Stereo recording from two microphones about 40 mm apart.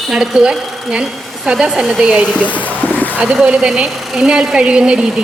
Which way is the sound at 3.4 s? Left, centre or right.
Right.